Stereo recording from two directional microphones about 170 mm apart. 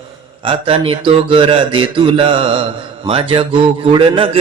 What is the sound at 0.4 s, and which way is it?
A man's voice, 35° right (ahead or behind).